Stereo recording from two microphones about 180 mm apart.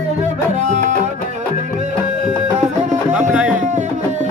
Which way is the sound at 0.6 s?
40° right (ahead or behind).